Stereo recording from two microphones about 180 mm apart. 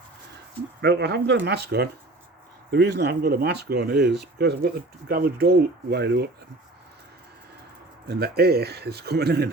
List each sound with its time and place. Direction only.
0.8 s speech: 65° right (ahead or behind)
8.0 s speech: 65° right (ahead or behind)